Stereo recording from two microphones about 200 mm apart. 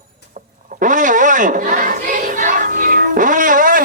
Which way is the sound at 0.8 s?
40° right (ahead or behind).